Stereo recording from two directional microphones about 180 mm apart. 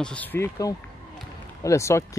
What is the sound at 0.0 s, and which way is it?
Speech, 5° left (ahead or behind).